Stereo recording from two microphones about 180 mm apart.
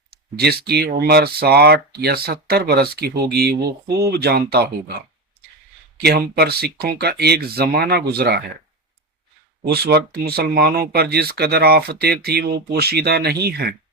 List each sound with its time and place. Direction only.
0.1 s a sound: 60° right (ahead or behind)
0.7 s speech: 65° right (ahead or behind)
9.7 s speech: 60° right (ahead or behind)